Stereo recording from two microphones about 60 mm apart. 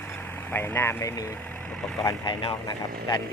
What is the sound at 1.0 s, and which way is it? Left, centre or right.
Speech, left.